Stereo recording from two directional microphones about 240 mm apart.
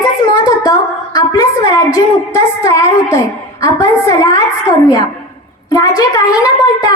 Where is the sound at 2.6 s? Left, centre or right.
Centre.